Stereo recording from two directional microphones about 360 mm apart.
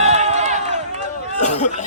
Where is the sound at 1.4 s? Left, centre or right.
Centre.